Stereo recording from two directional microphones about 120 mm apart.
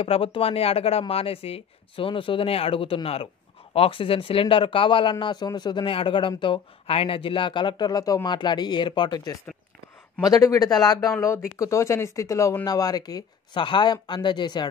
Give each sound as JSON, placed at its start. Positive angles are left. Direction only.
{"t": 0.0, "sound": "a man's voice", "side_deg": 50}